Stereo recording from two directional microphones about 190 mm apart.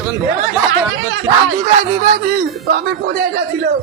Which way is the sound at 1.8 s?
45° right (ahead or behind).